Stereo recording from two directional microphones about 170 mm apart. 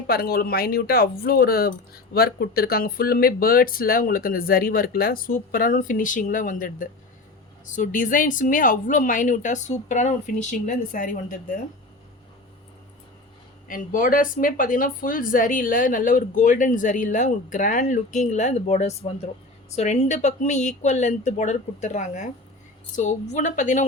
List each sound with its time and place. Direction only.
0.1 s a woman's voice: 60° left (ahead or behind)
13.7 s a woman's voice: 55° left (ahead or behind)